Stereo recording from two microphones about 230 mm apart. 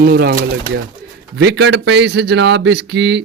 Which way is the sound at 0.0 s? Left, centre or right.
Right.